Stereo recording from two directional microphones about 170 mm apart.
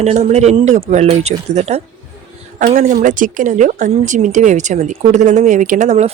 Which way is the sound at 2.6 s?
50° right (ahead or behind).